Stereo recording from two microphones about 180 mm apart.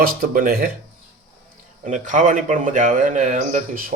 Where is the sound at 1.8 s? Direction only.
45° right (ahead or behind).